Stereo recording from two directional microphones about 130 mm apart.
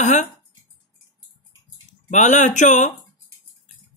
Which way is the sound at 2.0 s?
70° left (ahead or behind).